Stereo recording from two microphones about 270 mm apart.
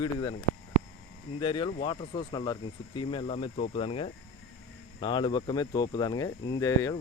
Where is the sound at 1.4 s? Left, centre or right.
Centre.